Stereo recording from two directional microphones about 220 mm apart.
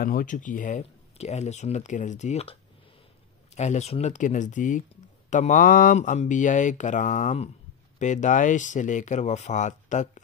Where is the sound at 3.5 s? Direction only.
30° left (ahead or behind).